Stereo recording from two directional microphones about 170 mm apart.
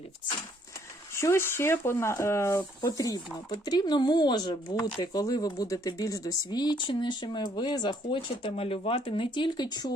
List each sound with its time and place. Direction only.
1.1 s speech: 15° left (ahead or behind)